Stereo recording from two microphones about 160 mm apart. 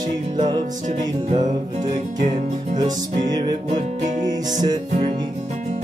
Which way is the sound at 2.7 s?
25° right (ahead or behind).